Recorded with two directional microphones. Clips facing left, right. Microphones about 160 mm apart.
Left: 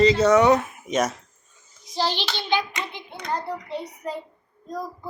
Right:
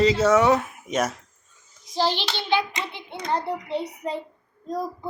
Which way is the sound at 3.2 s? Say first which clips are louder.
Right 3 dB; 30° right (ahead or behind).